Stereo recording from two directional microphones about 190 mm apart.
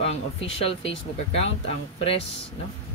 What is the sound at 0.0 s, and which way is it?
Speech, 30° left (ahead or behind).